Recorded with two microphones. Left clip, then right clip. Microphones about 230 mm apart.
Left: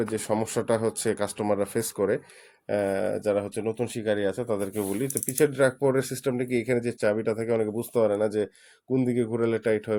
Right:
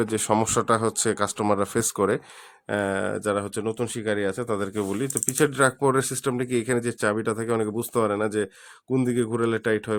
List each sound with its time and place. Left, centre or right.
0.0 s speech: right